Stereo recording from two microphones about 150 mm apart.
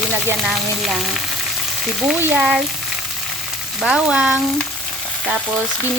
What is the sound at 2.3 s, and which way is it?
Frying, 5° right (ahead or behind).